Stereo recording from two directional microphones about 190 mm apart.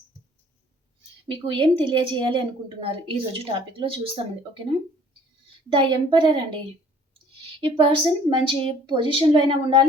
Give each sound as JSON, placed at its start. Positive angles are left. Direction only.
{"t": 1.3, "sound": "a woman's voice", "side_deg": -25}
{"t": 5.7, "sound": "a woman's voice", "side_deg": -25}
{"t": 7.6, "sound": "a woman's voice", "side_deg": -25}